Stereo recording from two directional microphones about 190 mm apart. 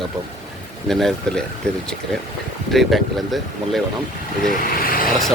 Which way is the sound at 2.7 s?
Centre (ahead or behind).